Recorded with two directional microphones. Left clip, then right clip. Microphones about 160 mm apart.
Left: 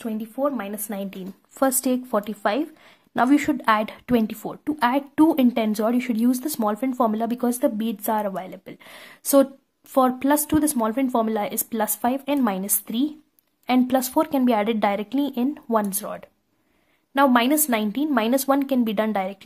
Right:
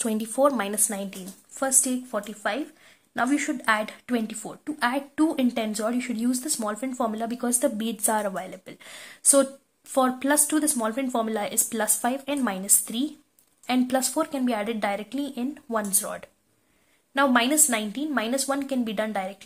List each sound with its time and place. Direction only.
0.0 s speech: centre (ahead or behind)
0.8 s speech: 20° left (ahead or behind)
1.6 s speech: 40° left (ahead or behind)